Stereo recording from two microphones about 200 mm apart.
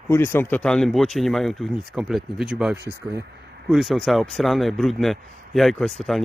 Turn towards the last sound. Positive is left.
turn(degrees=0)  # may be behind; listen again after turning